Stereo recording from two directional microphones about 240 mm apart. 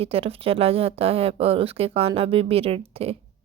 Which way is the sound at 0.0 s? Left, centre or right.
Right.